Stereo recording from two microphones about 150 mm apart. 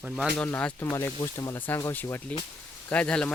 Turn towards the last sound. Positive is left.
turn(degrees=5)  # may be behind; listen again after turning